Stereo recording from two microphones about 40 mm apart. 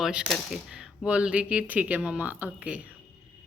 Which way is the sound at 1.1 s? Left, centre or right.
Right.